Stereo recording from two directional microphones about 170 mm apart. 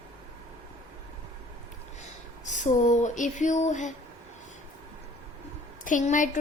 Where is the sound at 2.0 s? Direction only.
45° left (ahead or behind).